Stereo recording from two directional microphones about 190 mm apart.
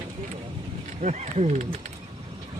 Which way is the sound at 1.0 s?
35° right (ahead or behind).